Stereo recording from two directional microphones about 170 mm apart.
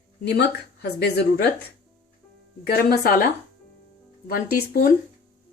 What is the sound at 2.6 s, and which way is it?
Speech, 65° left (ahead or behind).